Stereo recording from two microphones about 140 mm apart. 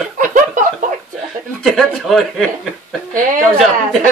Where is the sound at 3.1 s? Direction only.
70° right (ahead or behind).